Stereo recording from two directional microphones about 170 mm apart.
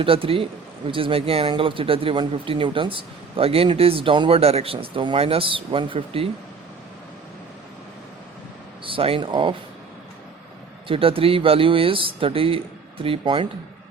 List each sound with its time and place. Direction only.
0.0 s speech: 30° right (ahead or behind)
8.8 s speech: 30° right (ahead or behind)
10.8 s speech: 35° right (ahead or behind)